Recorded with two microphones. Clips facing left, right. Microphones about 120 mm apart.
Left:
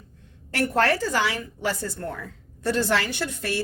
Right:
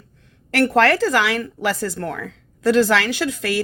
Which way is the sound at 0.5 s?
90° right.